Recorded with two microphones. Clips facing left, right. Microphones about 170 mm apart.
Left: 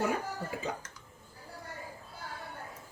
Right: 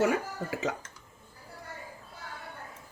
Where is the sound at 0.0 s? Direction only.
85° right.